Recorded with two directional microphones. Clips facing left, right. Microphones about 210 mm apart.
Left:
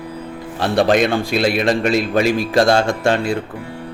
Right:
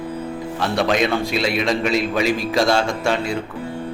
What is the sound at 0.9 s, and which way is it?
A man's voice, 50° left (ahead or behind).